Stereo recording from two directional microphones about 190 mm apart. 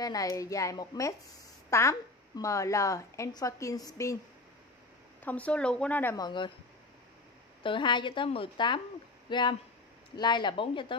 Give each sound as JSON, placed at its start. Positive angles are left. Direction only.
{"t": 0.0, "sound": "a woman's voice", "side_deg": 20}
{"t": 5.2, "sound": "a woman's voice", "side_deg": 10}
{"t": 6.1, "sound": "a woman's voice", "side_deg": 25}
{"t": 7.6, "sound": "a woman's voice", "side_deg": 25}